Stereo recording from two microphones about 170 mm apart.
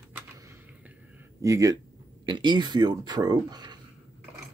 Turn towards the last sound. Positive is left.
turn(degrees=-25)  # may be behind; listen again after turning